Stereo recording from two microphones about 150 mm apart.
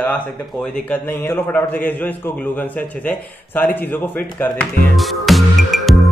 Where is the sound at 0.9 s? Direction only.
10° left (ahead or behind).